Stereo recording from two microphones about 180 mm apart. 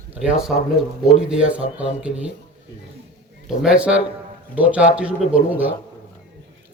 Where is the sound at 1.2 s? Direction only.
5° right (ahead or behind).